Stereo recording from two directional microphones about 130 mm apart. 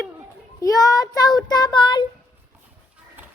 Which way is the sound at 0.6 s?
30° left (ahead or behind).